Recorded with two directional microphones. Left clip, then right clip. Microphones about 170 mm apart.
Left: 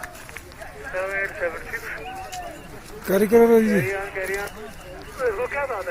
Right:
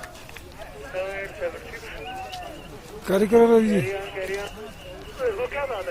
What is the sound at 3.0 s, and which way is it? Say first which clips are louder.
Speech: left 1 dB; 10° left (ahead or behind).